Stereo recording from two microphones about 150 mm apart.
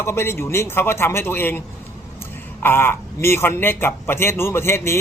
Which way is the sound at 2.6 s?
15° left (ahead or behind).